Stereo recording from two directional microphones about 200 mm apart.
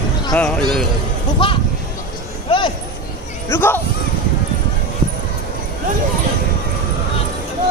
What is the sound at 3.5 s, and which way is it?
Speech, 10° left (ahead or behind).